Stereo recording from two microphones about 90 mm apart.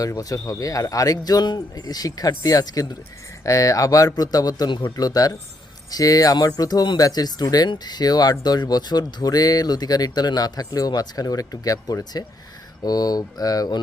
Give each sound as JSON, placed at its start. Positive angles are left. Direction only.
{"t": 0.0, "sound": "speech", "side_deg": 40}